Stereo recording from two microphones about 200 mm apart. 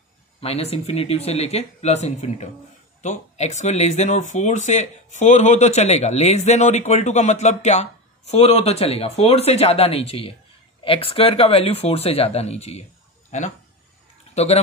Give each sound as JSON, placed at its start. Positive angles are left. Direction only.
{"t": 0.4, "sound": "speech", "side_deg": 30}
{"t": 14.3, "sound": "speech", "side_deg": 30}